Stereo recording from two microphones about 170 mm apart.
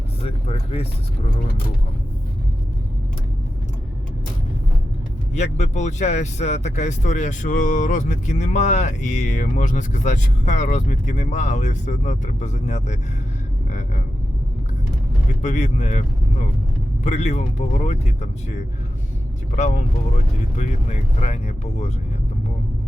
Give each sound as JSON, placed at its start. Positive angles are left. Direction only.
{"t": 0.2, "sound": "speech", "side_deg": 35}
{"t": 5.3, "sound": "speech", "side_deg": 40}
{"t": 13.7, "sound": "vehicle", "side_deg": 45}
{"t": 15.4, "sound": "speech", "side_deg": 45}